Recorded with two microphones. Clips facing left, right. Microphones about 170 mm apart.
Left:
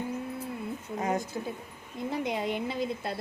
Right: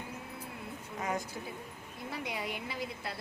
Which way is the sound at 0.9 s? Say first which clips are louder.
Left 5 dB; 35° left (ahead or behind).